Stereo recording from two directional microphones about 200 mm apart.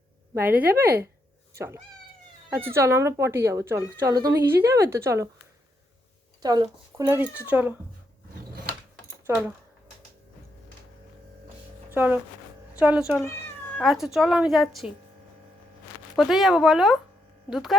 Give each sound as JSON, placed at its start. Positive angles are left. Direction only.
{"t": 0.6, "sound": "speech", "side_deg": -10}
{"t": 6.4, "sound": "speech", "side_deg": -20}
{"t": 9.2, "sound": "speech", "side_deg": -10}
{"t": 11.9, "sound": "speech", "side_deg": -10}
{"t": 16.1, "sound": "speech", "side_deg": 0}